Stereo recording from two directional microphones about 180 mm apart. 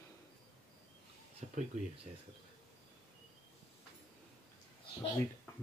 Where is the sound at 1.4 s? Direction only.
40° right (ahead or behind).